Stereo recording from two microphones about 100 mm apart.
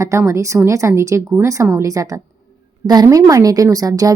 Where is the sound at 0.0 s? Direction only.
30° right (ahead or behind).